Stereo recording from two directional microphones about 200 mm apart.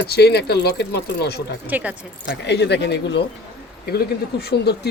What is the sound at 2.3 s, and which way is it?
Speech, 60° left (ahead or behind).